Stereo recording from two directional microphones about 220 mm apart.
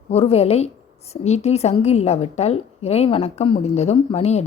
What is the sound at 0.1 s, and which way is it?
A woman's voice, 30° left (ahead or behind).